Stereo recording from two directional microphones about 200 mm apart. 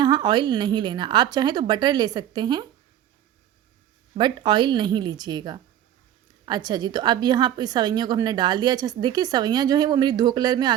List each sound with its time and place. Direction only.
0.0 s a woman's voice: 20° right (ahead or behind)
4.2 s a woman's voice: 20° right (ahead or behind)